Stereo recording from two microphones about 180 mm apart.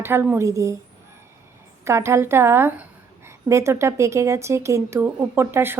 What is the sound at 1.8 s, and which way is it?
A woman's voice, 15° right (ahead or behind).